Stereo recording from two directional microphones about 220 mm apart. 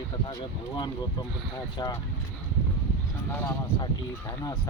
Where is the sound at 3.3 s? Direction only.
15° left (ahead or behind).